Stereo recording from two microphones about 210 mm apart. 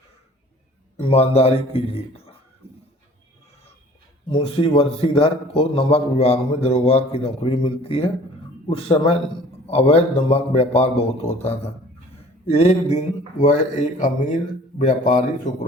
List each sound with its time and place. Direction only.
0.9 s a man's voice: 30° left (ahead or behind)
4.3 s a man's voice: 25° left (ahead or behind)